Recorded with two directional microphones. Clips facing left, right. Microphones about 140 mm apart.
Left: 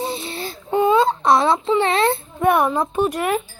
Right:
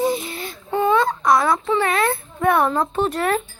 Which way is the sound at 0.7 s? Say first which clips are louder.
Left 2 dB; 15° left (ahead or behind).